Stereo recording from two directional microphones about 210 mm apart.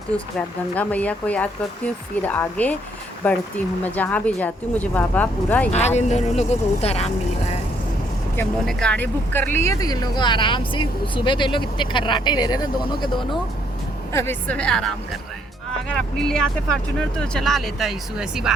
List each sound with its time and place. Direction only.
0.8 s speech: 5° left (ahead or behind)
5.7 s speech: 30° left (ahead or behind)
8.4 s speech: 5° left (ahead or behind); by 13.2 s 20° left (ahead or behind)
14.1 s speech: 10° left (ahead or behind)
16.1 s speech: 5° left (ahead or behind)